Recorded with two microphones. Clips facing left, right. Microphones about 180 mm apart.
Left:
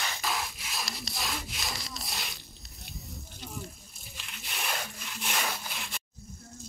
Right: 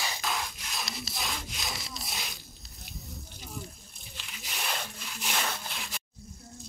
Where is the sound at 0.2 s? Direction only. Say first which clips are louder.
Even; centre (ahead or behind).